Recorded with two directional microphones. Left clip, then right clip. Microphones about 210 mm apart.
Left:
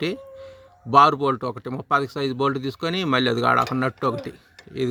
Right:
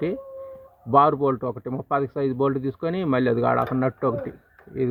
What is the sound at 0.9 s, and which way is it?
A man's voice, 30° left (ahead or behind).